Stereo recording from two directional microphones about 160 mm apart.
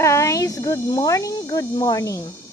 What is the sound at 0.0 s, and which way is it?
Speech, 20° left (ahead or behind).